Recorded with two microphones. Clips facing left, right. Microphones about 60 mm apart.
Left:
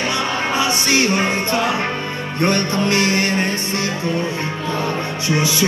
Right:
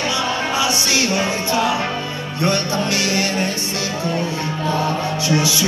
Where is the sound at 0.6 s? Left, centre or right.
Left.